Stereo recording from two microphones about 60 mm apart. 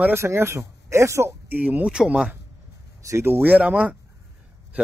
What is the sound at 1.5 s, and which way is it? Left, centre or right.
Speech, right.